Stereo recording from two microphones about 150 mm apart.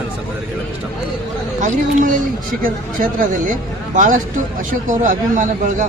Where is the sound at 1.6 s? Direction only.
55° right (ahead or behind).